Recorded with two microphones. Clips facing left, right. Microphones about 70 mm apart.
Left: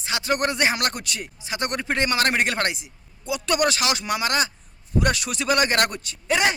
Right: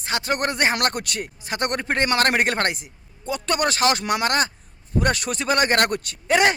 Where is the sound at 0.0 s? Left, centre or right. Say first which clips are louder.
Even; right.